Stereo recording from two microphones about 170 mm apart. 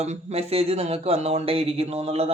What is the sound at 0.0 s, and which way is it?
Speech, 40° right (ahead or behind).